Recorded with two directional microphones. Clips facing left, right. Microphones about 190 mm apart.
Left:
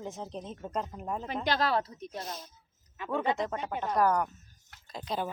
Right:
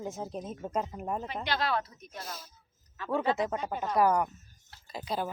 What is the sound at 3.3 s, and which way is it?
Speech, 5° right (ahead or behind).